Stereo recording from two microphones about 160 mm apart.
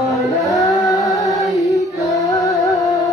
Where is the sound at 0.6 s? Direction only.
20° left (ahead or behind).